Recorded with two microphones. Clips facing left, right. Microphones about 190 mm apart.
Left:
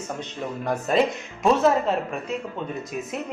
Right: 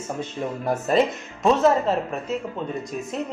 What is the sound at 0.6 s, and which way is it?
Speech, 5° right (ahead or behind).